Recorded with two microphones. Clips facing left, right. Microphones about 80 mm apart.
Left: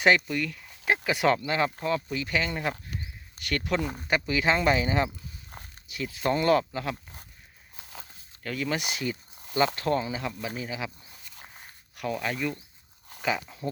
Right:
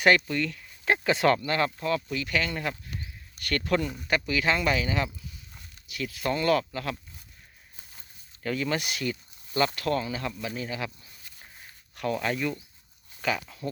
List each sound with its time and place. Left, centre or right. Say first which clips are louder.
0.3 s speech: right 1 dB; centre
4.1 s speech: left 1 dB; left
8.4 s speech: right 2 dB; centre
8.8 s speech: even; centre
11.9 s speech: right 2 dB; centre
13.2 s speech: even; centre